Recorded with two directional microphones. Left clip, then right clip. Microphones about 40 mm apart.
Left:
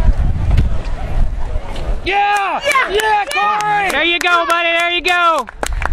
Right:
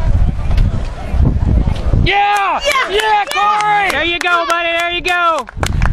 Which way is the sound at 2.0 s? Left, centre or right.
Right.